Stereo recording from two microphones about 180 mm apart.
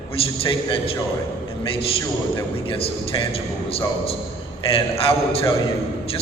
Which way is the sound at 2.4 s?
30° left (ahead or behind).